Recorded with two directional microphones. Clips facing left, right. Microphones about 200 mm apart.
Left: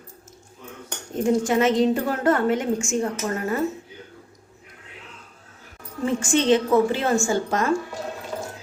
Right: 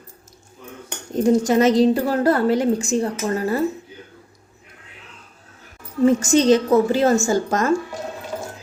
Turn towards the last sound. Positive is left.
turn(degrees=-45)  # may be behind; listen again after turning